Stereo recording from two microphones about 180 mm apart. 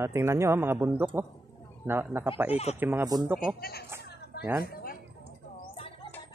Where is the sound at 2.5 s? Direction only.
35° left (ahead or behind).